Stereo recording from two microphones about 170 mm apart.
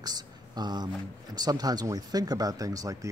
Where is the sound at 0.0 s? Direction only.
25° right (ahead or behind).